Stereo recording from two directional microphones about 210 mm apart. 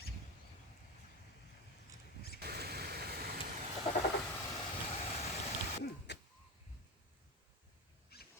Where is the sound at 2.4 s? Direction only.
50° right (ahead or behind).